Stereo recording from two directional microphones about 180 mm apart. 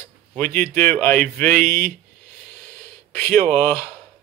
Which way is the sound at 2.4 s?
10° left (ahead or behind).